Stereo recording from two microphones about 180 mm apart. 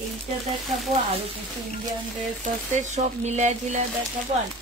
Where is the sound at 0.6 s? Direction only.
Centre (ahead or behind).